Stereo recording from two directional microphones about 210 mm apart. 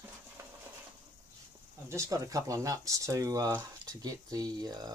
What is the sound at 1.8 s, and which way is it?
Speech, 15° right (ahead or behind).